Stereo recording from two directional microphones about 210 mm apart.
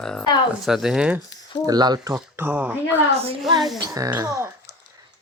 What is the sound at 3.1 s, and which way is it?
Speech, 30° right (ahead or behind).